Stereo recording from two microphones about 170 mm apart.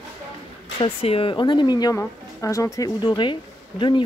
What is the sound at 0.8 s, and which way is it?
Speech, 35° left (ahead or behind).